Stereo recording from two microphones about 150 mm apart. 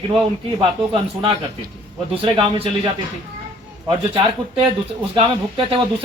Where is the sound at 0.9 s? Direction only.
35° right (ahead or behind).